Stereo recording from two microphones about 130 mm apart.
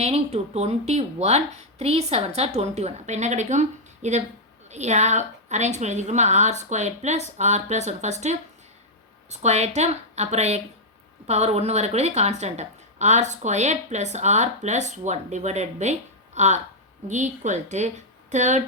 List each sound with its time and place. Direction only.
0.0 s a woman's voice: 55° right (ahead or behind)
9.3 s a woman's voice: 60° right (ahead or behind)